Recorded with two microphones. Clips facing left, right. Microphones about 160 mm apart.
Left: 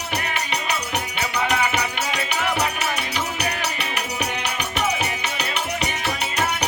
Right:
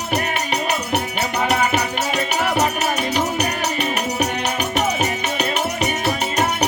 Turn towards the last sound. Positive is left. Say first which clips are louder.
# right 5 dB
turn(degrees=-45)  # may be behind; listen again after turning